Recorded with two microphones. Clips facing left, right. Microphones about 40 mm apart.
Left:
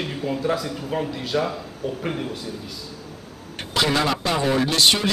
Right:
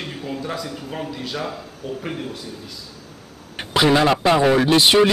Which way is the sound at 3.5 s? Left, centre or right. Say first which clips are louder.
Right 5 dB; centre.